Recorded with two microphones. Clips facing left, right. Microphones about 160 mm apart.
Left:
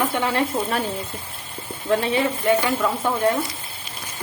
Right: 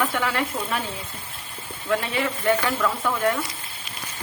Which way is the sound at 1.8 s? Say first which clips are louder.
Left 4 dB; 30° left (ahead or behind).